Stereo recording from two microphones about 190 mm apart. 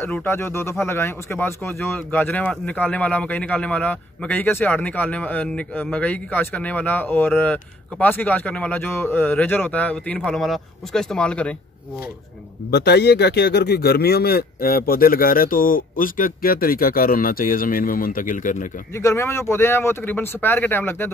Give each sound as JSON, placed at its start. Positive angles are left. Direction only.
{"t": 0.0, "sound": "speech", "side_deg": 10}
{"t": 12.7, "sound": "speech", "side_deg": 60}
{"t": 18.9, "sound": "speech", "side_deg": 15}